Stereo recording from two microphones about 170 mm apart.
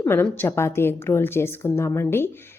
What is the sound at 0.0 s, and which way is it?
A woman's voice, 15° left (ahead or behind).